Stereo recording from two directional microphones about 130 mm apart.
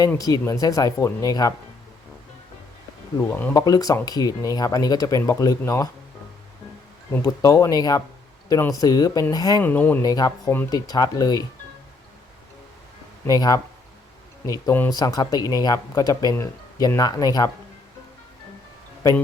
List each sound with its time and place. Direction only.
0.2 s speech: 25° left (ahead or behind)
3.2 s speech: 15° left (ahead or behind)
3.6 s speech: 30° left (ahead or behind)
7.2 s speech: 25° left (ahead or behind)
9.6 s speech: 15° left (ahead or behind)
10.0 s speech: 30° left (ahead or behind)
13.2 s speech: 30° left (ahead or behind)